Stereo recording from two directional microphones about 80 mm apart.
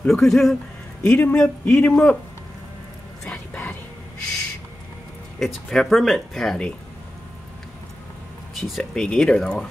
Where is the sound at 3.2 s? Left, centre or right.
Centre.